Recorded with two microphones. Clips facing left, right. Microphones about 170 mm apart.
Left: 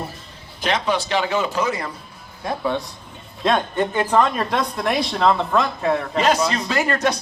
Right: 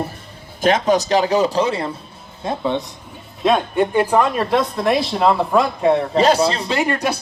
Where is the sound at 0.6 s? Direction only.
45° right (ahead or behind); by 2.9 s 20° right (ahead or behind).